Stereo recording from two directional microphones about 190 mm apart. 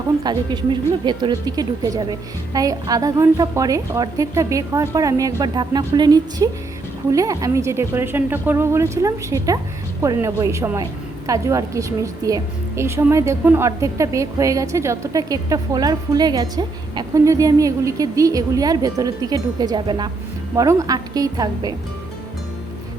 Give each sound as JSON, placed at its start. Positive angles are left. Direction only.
{"t": 0.2, "sound": "a woman's voice", "side_deg": -25}